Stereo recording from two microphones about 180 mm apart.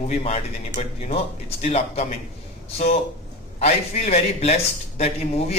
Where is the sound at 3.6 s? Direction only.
35° left (ahead or behind).